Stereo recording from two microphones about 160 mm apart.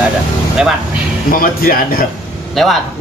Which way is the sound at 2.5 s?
Centre (ahead or behind).